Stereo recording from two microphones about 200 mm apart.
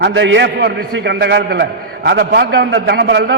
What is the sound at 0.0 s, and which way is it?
A man's voice, 65° right (ahead or behind).